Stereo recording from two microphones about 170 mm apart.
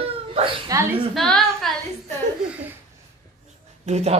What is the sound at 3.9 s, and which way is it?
Speech, 40° right (ahead or behind).